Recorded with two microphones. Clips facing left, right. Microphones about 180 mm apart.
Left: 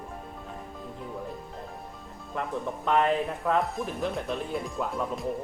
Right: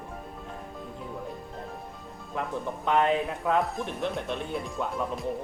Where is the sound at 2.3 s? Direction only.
Centre (ahead or behind).